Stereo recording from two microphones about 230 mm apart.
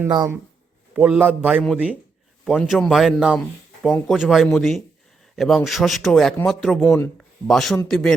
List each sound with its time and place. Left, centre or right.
0.0 s a man's voice: centre
6.8 s speech: centre
7.2 s a sound: centre
7.9 s speech: centre